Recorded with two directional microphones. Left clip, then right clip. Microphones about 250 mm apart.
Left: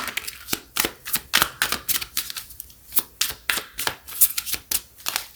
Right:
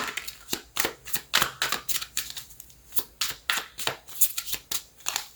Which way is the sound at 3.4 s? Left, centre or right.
Left.